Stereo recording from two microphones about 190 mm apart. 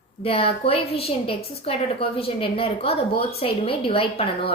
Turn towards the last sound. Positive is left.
turn(degrees=30)  # may be behind; listen again after turning